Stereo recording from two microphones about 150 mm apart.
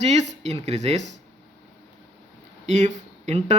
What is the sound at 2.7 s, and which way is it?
Speech, 55° right (ahead or behind).